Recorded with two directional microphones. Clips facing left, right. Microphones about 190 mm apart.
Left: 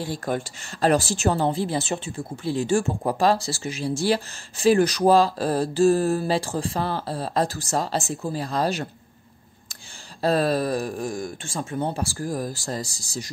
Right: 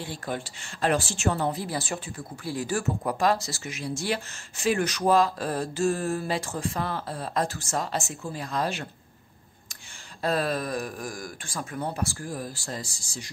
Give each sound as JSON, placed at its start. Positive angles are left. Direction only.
{"t": 0.0, "sound": "speech", "side_deg": 40}
{"t": 10.2, "sound": "speech", "side_deg": 35}